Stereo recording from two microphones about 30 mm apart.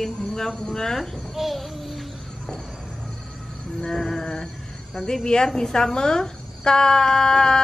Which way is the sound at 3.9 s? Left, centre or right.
Centre.